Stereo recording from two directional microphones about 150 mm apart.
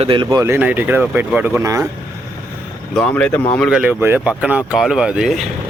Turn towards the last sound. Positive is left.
turn(degrees=-5)  # may be behind; listen again after turning